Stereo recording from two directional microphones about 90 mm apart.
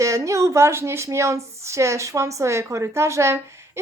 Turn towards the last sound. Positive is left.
turn(degrees=-30)  # may be behind; listen again after turning